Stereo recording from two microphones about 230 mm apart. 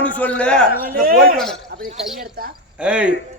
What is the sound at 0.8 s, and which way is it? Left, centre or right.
Speech, right.